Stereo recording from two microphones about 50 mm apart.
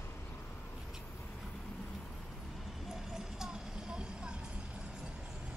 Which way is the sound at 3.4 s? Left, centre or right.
Centre.